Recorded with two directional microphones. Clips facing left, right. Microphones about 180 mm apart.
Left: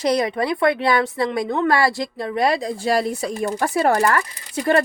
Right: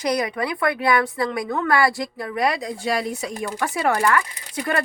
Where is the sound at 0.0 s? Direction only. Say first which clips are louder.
Left 3 dB; 25° left (ahead or behind).